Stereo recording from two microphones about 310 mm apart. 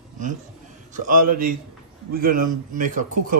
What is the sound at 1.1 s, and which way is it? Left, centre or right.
A man's voice, right.